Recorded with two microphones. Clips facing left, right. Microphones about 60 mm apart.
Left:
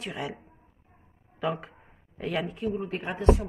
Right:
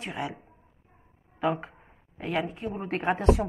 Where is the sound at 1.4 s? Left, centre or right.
Right.